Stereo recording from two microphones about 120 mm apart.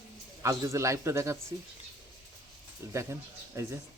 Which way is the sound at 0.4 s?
25° right (ahead or behind).